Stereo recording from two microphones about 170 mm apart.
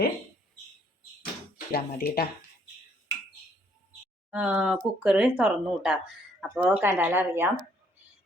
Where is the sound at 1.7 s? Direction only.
60° left (ahead or behind).